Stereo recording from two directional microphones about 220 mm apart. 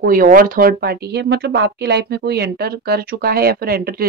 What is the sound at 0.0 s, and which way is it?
Speech, 40° right (ahead or behind).